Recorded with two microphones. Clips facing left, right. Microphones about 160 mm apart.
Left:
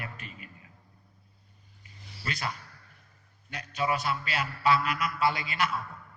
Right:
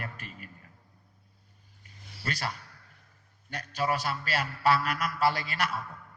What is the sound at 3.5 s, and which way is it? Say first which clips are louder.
A man's voice: even; 50° right (ahead or behind).